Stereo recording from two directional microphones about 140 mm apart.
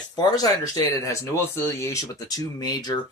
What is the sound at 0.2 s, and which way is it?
Speech, 30° left (ahead or behind).